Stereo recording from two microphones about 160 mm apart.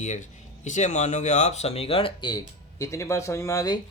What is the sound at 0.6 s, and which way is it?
Speech, 50° left (ahead or behind).